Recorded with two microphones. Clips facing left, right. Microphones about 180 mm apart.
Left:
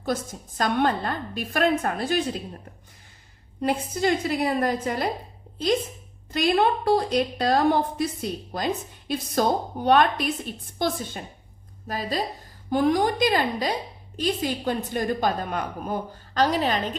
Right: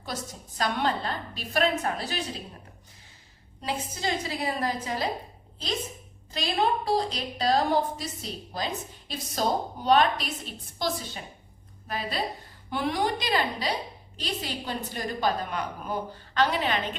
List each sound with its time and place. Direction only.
0.0 s a woman's voice: 50° left (ahead or behind)
3.6 s a woman's voice: 55° left (ahead or behind)
6.3 s a woman's voice: 55° left (ahead or behind)
11.9 s a woman's voice: 40° left (ahead or behind)